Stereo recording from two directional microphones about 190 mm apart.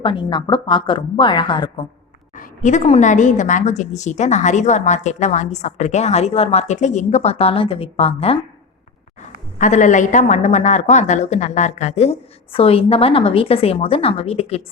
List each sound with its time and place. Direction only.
0.0 s a woman's voice: 25° left (ahead or behind)
2.3 s a woman's voice: 45° left (ahead or behind)
9.6 s a woman's voice: 40° left (ahead or behind)